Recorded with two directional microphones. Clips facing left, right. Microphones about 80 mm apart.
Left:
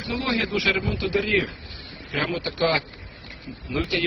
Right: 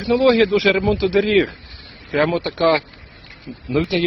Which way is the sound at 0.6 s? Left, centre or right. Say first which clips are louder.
Right 9 dB; right.